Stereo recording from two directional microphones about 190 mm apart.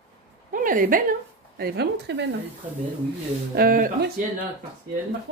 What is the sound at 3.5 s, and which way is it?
Speech, 50° right (ahead or behind).